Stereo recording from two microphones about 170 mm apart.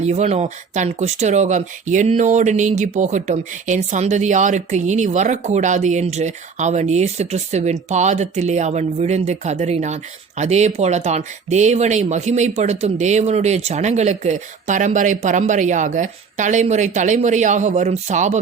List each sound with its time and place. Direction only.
0.0 s speech: 40° right (ahead or behind)